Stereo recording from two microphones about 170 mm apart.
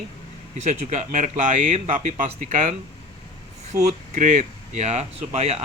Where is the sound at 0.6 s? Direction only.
40° right (ahead or behind).